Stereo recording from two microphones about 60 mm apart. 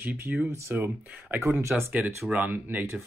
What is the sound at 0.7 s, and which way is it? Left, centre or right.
Speech, right.